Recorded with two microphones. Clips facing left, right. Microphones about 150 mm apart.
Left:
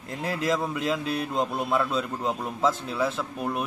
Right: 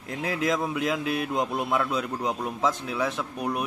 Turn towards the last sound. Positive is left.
turn(degrees=0)  # may be behind; listen again after turning